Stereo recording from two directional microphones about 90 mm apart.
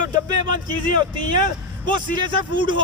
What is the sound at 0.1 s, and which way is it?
A man's voice, 55° right (ahead or behind).